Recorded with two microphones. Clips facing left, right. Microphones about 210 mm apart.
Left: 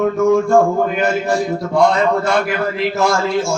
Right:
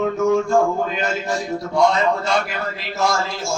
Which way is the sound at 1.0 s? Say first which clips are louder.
Left 6 dB; 55° left (ahead or behind).